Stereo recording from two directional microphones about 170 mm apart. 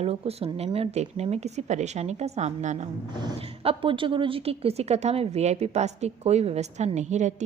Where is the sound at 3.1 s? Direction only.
30° right (ahead or behind).